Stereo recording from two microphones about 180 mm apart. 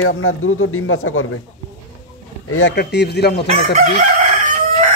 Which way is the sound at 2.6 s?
70° left (ahead or behind).